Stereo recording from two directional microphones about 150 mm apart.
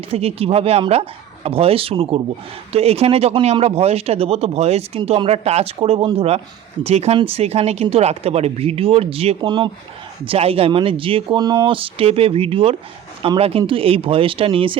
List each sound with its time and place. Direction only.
0.1 s speech: 40° right (ahead or behind)